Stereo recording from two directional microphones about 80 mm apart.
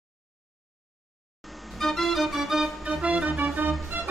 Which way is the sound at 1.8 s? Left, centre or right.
Centre.